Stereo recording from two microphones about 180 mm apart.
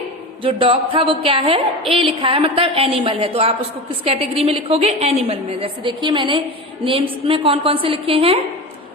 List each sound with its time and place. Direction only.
0.4 s a woman's voice: 30° right (ahead or behind)